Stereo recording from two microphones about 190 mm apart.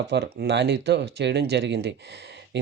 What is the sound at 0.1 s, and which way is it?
Speech, 65° right (ahead or behind).